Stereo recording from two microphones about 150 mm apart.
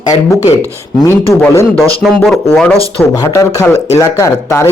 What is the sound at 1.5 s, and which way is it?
Speech, 20° left (ahead or behind).